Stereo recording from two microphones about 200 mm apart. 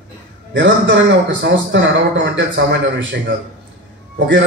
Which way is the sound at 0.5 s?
65° right (ahead or behind).